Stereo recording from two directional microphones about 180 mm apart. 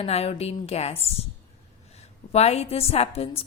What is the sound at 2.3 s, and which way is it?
A woman's voice, 35° left (ahead or behind).